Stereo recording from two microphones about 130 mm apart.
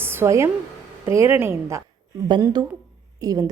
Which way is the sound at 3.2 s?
30° right (ahead or behind).